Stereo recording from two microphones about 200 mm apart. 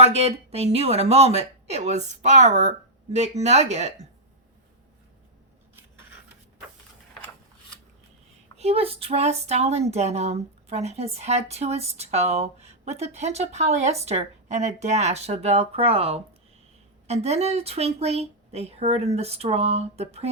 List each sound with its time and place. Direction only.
0.0 s speech: 30° right (ahead or behind)
8.5 s speech: 30° right (ahead or behind)